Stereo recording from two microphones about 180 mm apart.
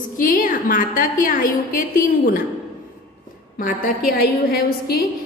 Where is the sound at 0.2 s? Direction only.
50° left (ahead or behind).